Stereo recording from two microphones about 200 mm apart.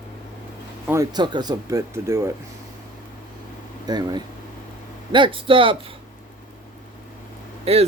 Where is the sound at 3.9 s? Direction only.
20° right (ahead or behind).